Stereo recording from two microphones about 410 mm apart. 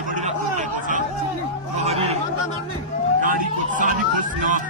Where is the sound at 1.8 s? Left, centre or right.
Centre.